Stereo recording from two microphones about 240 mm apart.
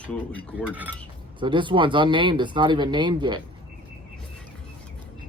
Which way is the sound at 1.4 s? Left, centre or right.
Centre.